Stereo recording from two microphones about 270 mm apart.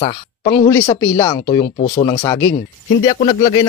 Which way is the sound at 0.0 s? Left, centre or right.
Left.